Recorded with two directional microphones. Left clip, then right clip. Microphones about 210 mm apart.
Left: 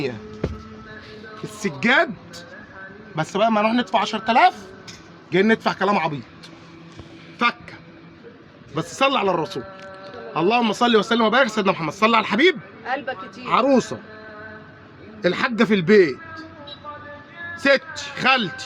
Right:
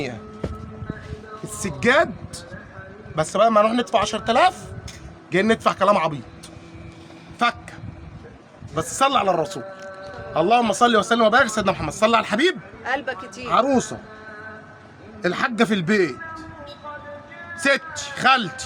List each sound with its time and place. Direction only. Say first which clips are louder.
1.6 s speech: even; 20° right (ahead or behind)
8.7 s speech: right 1 dB; 25° right (ahead or behind)
12.8 s speech: right 2 dB; 5° right (ahead or behind)
13.5 s speech: left 1 dB; 15° right (ahead or behind)
15.2 s speech: left 1 dB; 20° right (ahead or behind)
17.5 s a man's voice: left 2 dB; 20° right (ahead or behind)